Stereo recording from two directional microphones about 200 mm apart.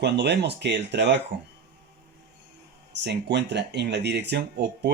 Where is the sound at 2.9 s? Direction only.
60° right (ahead or behind).